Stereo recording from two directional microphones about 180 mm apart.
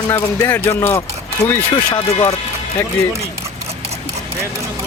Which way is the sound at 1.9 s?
25° left (ahead or behind).